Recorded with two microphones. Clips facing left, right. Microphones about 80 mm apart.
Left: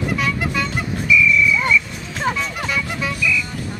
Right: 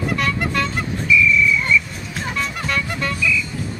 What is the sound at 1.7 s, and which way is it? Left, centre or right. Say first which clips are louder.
Music: even; centre.